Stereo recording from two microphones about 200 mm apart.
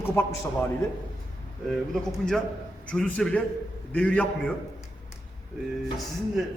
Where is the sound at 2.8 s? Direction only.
5° left (ahead or behind).